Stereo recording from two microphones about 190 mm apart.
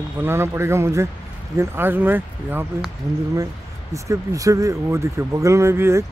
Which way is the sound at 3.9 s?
15° right (ahead or behind).